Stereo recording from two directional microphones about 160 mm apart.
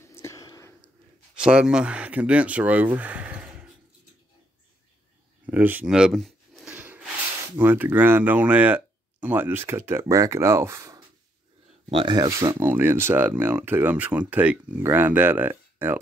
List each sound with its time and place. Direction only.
0.0 s whispering: 15° left (ahead or behind)
1.3 s speech: 5° right (ahead or behind)
5.5 s speech: 10° right (ahead or behind)
6.7 s a sound: 10° right (ahead or behind)
7.5 s speech: 10° right (ahead or behind)
11.9 s speech: 30° right (ahead or behind); by 16.0 s 10° right (ahead or behind)